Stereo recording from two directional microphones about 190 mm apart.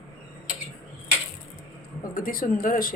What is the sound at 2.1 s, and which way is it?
Speech, 45° left (ahead or behind).